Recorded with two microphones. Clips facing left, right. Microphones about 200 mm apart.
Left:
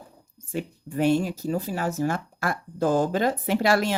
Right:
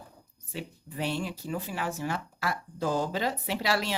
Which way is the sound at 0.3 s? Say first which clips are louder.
Left 8 dB; 50° left (ahead or behind).